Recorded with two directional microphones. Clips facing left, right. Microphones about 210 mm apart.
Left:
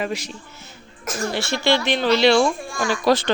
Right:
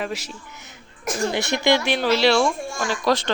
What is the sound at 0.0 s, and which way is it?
Speech, 5° right (ahead or behind).